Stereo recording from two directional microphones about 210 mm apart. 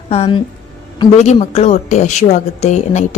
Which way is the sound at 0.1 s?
25° left (ahead or behind).